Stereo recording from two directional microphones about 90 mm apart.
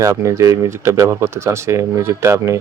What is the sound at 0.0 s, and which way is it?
Speech, 35° right (ahead or behind).